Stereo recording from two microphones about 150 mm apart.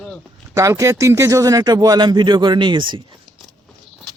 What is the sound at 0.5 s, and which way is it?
Speech, 20° right (ahead or behind).